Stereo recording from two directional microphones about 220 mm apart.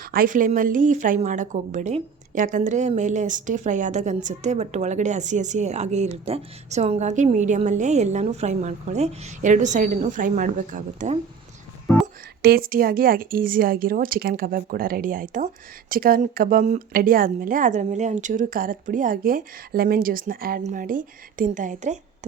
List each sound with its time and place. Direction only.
0.1 s a woman's voice: 40° right (ahead or behind)
12.4 s a woman's voice: 45° right (ahead or behind)